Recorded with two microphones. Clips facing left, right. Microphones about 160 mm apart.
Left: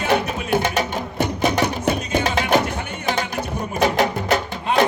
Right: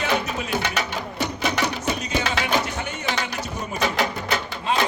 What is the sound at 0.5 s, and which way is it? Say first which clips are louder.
Music: left 7 dB; 50° left (ahead or behind).